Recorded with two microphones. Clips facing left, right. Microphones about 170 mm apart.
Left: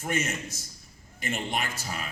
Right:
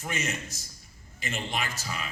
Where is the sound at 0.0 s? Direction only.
55° left (ahead or behind).